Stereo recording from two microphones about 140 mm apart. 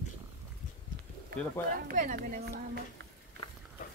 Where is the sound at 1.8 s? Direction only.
70° right (ahead or behind).